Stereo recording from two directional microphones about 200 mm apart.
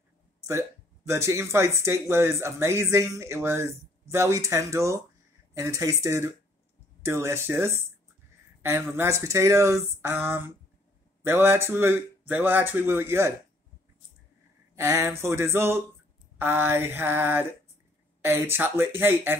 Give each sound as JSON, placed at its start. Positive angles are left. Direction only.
{"t": 0.4, "sound": "speech", "side_deg": -15}
{"t": 14.8, "sound": "speech", "side_deg": -15}